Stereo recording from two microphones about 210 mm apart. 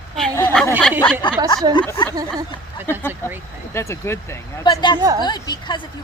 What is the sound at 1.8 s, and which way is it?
Speech, 20° left (ahead or behind).